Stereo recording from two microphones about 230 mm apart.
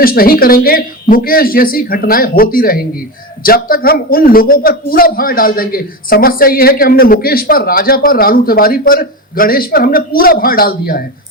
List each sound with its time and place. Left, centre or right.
0.0 s a man's voice: left